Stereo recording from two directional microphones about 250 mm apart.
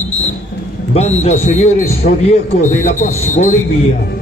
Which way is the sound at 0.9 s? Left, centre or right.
Left.